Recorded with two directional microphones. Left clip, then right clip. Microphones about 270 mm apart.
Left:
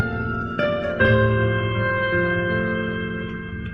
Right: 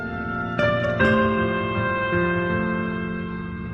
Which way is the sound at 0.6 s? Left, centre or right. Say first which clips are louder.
Even; right.